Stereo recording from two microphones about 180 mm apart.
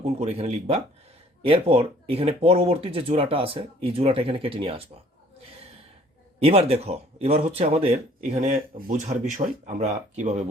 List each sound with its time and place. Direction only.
0.0 s speech: 35° right (ahead or behind)
6.4 s speech: 35° right (ahead or behind)